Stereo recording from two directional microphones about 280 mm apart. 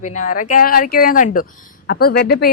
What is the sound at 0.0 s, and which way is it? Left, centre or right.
Speech, left.